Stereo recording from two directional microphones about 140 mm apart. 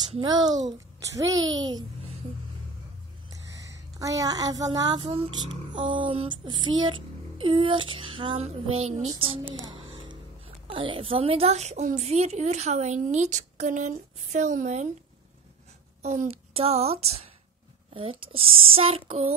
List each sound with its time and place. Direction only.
0.2 s a child's voice: 30° right (ahead or behind)
3.3 s a woman's voice: 25° right (ahead or behind); by 9.2 s 55° right (ahead or behind)
10.7 s a woman's voice: 40° right (ahead or behind); by 14.9 s 60° right (ahead or behind)
16.0 s a woman's voice: 50° right (ahead or behind)